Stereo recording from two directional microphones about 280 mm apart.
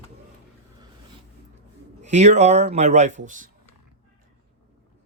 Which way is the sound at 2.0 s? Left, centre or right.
Right.